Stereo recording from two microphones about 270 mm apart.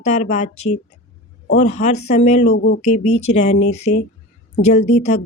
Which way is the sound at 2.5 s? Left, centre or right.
Left.